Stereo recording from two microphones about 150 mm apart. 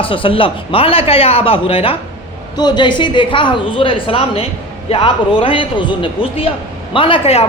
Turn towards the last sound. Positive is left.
turn(degrees=40)  # may be behind; listen again after turning